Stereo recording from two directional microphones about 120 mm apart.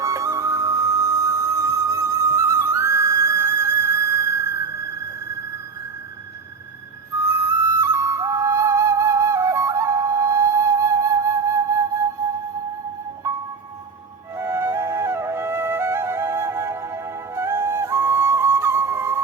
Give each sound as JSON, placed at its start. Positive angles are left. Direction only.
{"t": 0.0, "sound": "music", "side_deg": -25}
{"t": 7.2, "sound": "music", "side_deg": -25}
{"t": 13.2, "sound": "music", "side_deg": -25}
{"t": 14.3, "sound": "flute", "side_deg": -20}